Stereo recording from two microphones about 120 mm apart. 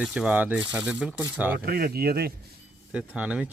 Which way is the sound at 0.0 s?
5° right (ahead or behind).